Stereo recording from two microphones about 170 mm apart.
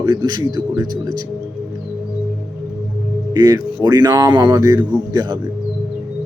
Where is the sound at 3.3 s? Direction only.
20° right (ahead or behind).